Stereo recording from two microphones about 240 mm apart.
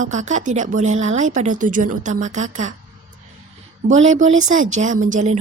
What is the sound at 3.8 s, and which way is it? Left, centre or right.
A woman's voice, right.